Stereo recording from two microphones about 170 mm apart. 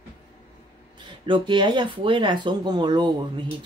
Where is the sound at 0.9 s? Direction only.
30° right (ahead or behind).